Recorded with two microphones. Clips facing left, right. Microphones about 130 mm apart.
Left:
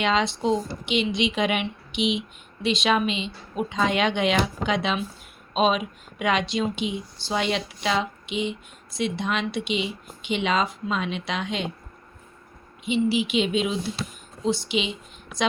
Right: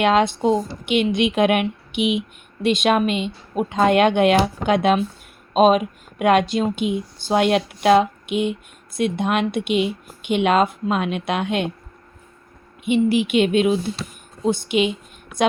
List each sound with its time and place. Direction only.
0.0 s speech: 55° right (ahead or behind)
12.8 s speech: 55° right (ahead or behind)